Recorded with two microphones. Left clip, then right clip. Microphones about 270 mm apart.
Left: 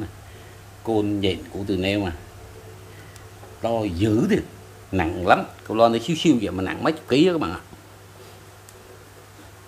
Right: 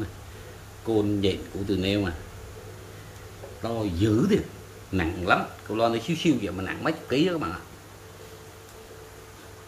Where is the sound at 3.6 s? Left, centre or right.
Centre.